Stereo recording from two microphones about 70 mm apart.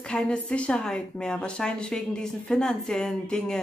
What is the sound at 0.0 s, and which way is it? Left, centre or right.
Speech, centre.